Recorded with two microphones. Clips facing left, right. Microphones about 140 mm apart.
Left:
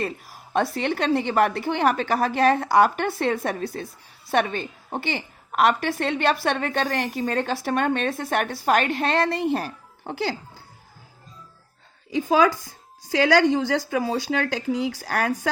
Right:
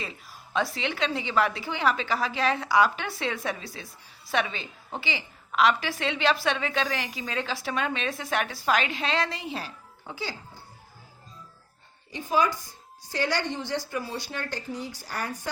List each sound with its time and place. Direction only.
0.0 s a woman's voice: 55° left (ahead or behind)
10.1 s speech: 70° left (ahead or behind)
12.4 s a woman's voice: 90° left